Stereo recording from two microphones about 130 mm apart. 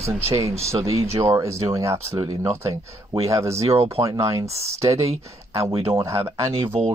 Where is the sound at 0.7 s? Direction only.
25° right (ahead or behind).